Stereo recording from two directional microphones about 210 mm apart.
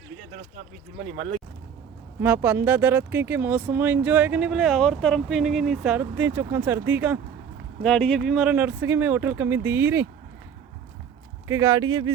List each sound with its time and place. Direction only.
1.0 s speech: 30° right (ahead or behind)
2.2 s speech: 10° right (ahead or behind)
7.8 s speech: 5° left (ahead or behind)
11.4 s speech: 15° right (ahead or behind)